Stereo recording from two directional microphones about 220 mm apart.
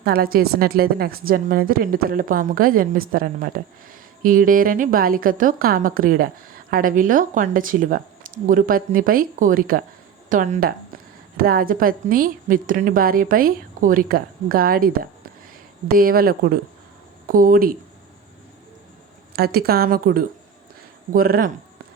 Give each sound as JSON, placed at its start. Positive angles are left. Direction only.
{"t": 0.0, "sound": "a woman's voice", "side_deg": -45}
{"t": 19.4, "sound": "a woman's voice", "side_deg": -45}